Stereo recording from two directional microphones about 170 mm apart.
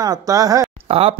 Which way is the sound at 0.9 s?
35° right (ahead or behind).